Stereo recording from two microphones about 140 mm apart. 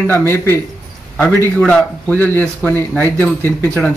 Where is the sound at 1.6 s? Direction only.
10° left (ahead or behind).